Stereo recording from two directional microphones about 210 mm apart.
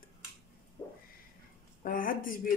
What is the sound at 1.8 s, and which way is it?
Speech, 40° left (ahead or behind).